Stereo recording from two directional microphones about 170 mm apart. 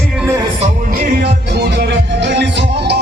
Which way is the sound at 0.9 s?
65° right (ahead or behind).